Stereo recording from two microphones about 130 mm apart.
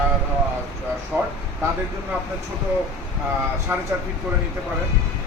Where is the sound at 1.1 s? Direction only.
20° right (ahead or behind).